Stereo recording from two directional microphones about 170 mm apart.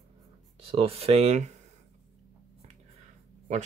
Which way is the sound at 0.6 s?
35° right (ahead or behind).